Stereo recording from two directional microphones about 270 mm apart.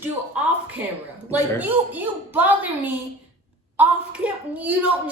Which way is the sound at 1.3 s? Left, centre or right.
Centre.